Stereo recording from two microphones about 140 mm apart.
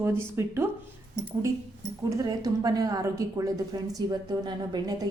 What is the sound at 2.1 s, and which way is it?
Music, 25° right (ahead or behind).